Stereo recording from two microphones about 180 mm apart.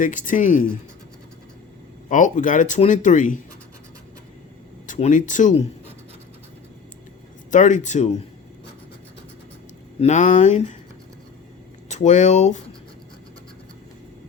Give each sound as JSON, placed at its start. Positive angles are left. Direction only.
{"t": 0.0, "sound": "speech", "side_deg": 45}
{"t": 2.0, "sound": "speech", "side_deg": 45}
{"t": 4.9, "sound": "speech", "side_deg": 40}
{"t": 7.5, "sound": "speech", "side_deg": 45}
{"t": 10.0, "sound": "speech", "side_deg": 40}
{"t": 11.9, "sound": "speech", "side_deg": 40}